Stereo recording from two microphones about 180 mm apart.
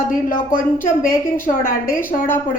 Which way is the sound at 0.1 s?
50° left (ahead or behind).